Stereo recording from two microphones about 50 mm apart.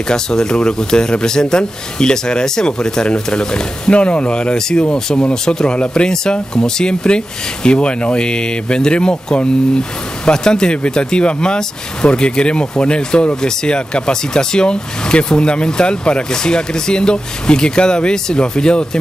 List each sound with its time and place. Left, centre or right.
0.1 s speech: centre